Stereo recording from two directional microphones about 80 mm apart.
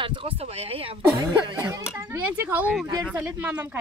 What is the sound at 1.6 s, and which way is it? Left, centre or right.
Speech, right.